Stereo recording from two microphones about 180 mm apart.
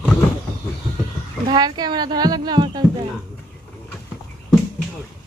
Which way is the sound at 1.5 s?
20° right (ahead or behind).